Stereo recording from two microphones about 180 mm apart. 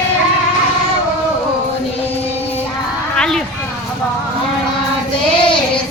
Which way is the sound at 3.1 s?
5° left (ahead or behind).